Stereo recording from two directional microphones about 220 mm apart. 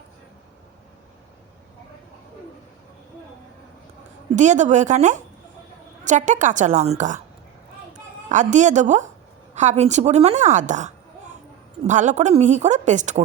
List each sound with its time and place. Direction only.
4.4 s a woman's voice: 35° right (ahead or behind)
8.3 s a woman's voice: 35° right (ahead or behind)